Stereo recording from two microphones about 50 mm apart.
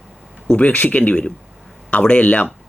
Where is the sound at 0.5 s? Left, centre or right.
Left.